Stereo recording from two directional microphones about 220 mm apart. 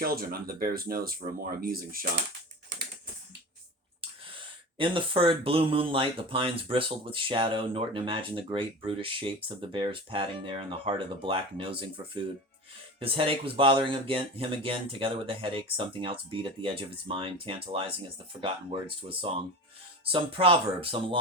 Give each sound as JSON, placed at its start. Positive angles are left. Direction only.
{"t": 0.0, "sound": "speech", "side_deg": -45}
{"t": 4.4, "sound": "speech", "side_deg": -25}